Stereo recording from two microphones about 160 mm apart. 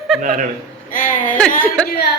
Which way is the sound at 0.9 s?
60° left (ahead or behind).